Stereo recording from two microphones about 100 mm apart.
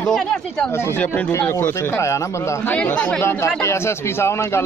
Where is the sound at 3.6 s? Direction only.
25° left (ahead or behind).